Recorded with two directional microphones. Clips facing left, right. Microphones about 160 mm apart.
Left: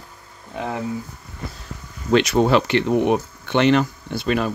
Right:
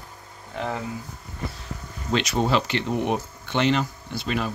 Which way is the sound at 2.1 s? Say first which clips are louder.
Left 7 dB; 60° left (ahead or behind).